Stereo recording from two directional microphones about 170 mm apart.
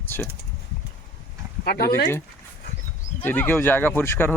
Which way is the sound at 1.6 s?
65° left (ahead or behind).